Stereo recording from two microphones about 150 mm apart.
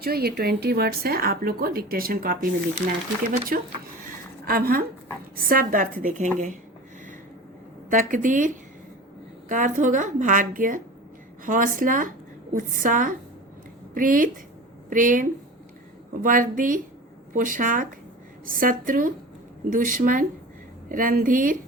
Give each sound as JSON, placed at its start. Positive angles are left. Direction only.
{"t": 0.0, "sound": "speech", "side_deg": -90}
{"t": 3.5, "sound": "a woman's voice", "side_deg": -70}
{"t": 7.9, "sound": "a woman's voice", "side_deg": -60}